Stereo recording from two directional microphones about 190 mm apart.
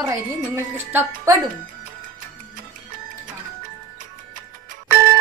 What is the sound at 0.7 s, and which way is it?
Speech, 10° right (ahead or behind).